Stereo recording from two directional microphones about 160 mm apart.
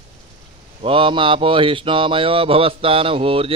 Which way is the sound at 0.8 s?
35° right (ahead or behind).